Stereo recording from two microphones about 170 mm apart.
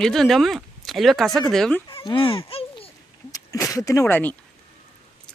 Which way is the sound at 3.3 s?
20° left (ahead or behind).